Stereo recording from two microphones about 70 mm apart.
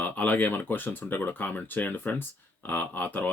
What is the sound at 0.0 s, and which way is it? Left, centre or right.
Speech, left.